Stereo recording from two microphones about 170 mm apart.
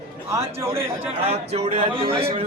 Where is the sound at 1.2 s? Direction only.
35° right (ahead or behind).